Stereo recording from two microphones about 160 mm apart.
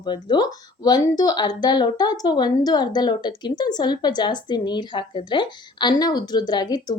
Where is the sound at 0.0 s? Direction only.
25° left (ahead or behind).